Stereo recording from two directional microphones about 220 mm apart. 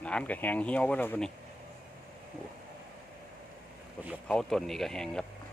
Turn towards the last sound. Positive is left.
turn(degrees=5)  # may be behind; listen again after turning